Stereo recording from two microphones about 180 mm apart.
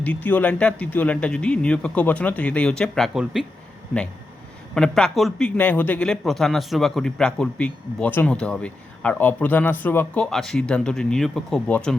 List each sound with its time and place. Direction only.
0.0 s speech: 10° left (ahead or behind)
4.7 s a man's voice: 5° left (ahead or behind)